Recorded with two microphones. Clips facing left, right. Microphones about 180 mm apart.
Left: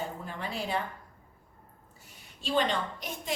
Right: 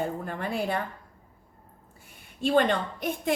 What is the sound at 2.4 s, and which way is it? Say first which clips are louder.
Speech: right 6 dB; 55° right (ahead or behind).